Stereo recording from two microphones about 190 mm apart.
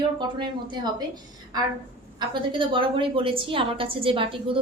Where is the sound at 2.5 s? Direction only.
25° right (ahead or behind).